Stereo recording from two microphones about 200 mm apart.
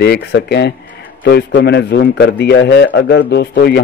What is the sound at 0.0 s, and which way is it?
A man's voice, 55° left (ahead or behind).